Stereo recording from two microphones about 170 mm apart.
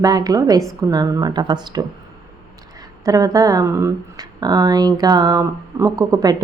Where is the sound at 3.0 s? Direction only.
20° right (ahead or behind).